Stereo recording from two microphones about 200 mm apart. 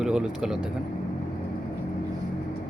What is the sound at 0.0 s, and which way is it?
Speech, 5° right (ahead or behind).